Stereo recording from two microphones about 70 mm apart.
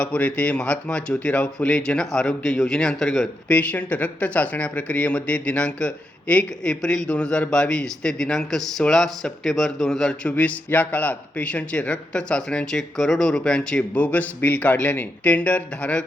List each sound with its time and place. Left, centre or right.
0.0 s speech: centre
3.5 s a man's voice: left
10.3 s a man's voice: left